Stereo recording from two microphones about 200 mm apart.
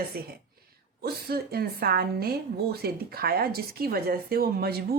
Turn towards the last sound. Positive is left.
turn(degrees=-50)  # may be behind; listen again after turning